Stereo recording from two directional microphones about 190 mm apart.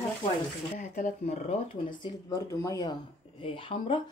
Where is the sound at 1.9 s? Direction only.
20° left (ahead or behind).